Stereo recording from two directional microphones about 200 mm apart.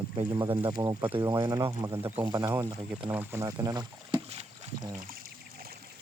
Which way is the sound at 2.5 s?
10° right (ahead or behind).